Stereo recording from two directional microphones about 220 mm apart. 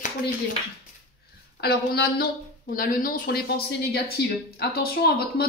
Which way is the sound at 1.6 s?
45° left (ahead or behind).